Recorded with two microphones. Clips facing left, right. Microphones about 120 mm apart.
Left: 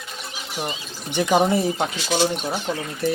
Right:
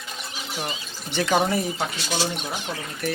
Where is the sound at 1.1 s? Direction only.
15° left (ahead or behind).